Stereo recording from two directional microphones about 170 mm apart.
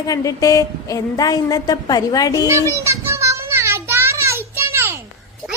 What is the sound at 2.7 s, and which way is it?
Child singing, 15° right (ahead or behind).